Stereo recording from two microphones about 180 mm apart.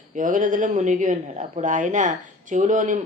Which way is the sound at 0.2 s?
45° right (ahead or behind).